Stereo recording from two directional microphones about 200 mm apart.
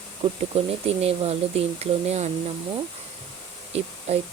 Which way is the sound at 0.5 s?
30° right (ahead or behind).